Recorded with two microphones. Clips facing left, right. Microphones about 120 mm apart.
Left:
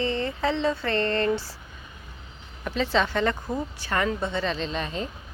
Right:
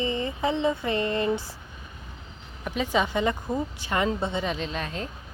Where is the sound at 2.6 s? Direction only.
10° right (ahead or behind).